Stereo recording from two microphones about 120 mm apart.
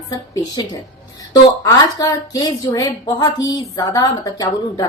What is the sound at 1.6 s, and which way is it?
A woman's voice, 30° left (ahead or behind).